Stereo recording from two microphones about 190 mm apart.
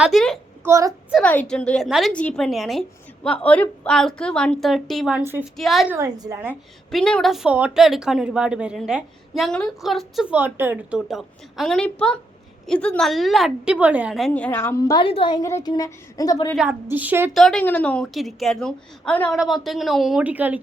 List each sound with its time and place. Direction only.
0.0 s a woman's voice: centre (ahead or behind)
0.6 s a woman's voice: 15° right (ahead or behind)
1.1 s a woman's voice: 5° left (ahead or behind)
6.0 s a woman's voice: 20° right (ahead or behind)
6.9 s a woman's voice: 5° left (ahead or behind)
15.0 s a woman's voice: 25° left (ahead or behind)
16.6 s a woman's voice: 10° right (ahead or behind)
17.3 s a woman's voice: 5° left (ahead or behind)